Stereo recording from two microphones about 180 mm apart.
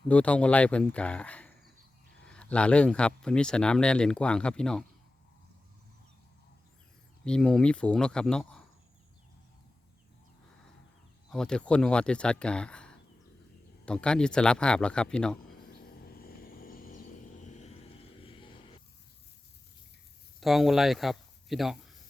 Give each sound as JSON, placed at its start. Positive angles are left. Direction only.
{"t": 0.1, "sound": "speech", "side_deg": 5}
{"t": 7.3, "sound": "speech", "side_deg": 5}
{"t": 11.3, "sound": "speech", "side_deg": 5}
{"t": 15.7, "sound": "vehicle", "side_deg": 55}
{"t": 20.4, "sound": "speech", "side_deg": 0}